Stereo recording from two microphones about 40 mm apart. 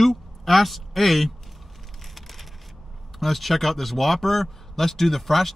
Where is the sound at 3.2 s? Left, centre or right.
Centre.